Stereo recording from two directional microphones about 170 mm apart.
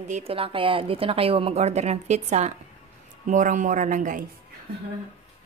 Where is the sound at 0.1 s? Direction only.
35° right (ahead or behind); by 4.3 s 50° right (ahead or behind).